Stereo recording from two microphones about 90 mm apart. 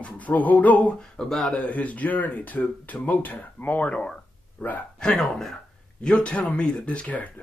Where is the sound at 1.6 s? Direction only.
15° left (ahead or behind).